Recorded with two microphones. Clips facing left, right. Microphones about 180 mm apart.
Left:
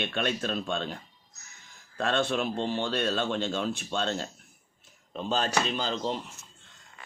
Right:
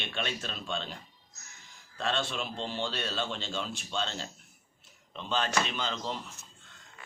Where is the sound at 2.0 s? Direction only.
55° left (ahead or behind).